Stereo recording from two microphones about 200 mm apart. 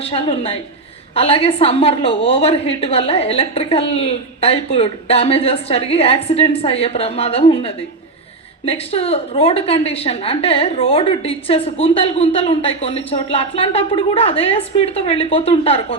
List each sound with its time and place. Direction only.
0.0 s a woman's voice: 30° left (ahead or behind)